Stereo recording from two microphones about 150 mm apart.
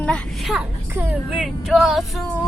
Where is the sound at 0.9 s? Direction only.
15° right (ahead or behind).